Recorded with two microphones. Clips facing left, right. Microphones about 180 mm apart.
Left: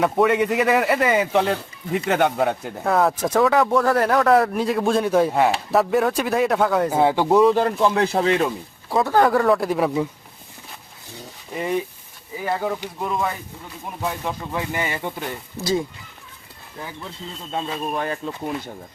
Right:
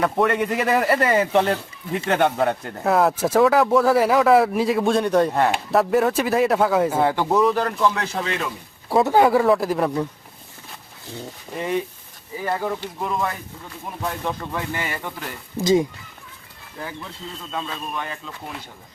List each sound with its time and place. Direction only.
0.0 s speech: centre (ahead or behind)
6.9 s speech: 10° left (ahead or behind); by 8.4 s 35° left (ahead or behind)
9.0 s speech: 15° right (ahead or behind); by 10.1 s 5° left (ahead or behind)
12.5 s speech: centre (ahead or behind)
15.6 s speech: 20° right (ahead or behind)
17.5 s a man's voice: 35° left (ahead or behind)